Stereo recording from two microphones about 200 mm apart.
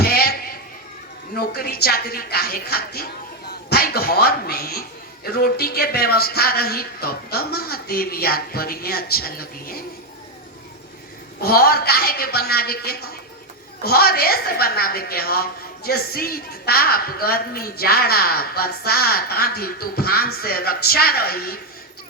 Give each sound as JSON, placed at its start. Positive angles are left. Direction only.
{"t": 0.0, "sound": "basketball bounce", "side_deg": 50}
{"t": 1.4, "sound": "a woman's voice", "side_deg": 50}
{"t": 11.3, "sound": "a woman's voice", "side_deg": 50}